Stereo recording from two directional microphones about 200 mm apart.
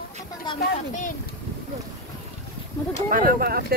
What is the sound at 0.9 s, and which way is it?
Boat, 40° left (ahead or behind).